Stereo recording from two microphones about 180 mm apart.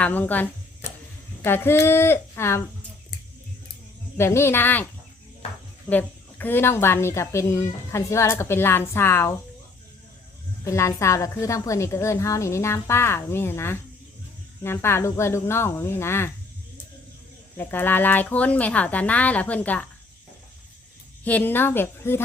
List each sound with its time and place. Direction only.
0.0 s a child's voice: 10° left (ahead or behind)
4.2 s a child's voice: 15° left (ahead or behind)
5.9 s a child's voice: 10° left (ahead or behind)
10.6 s a child's voice: 15° left (ahead or behind)
17.6 s a child's voice: 10° left (ahead or behind)
21.2 s a child's voice: 10° left (ahead or behind)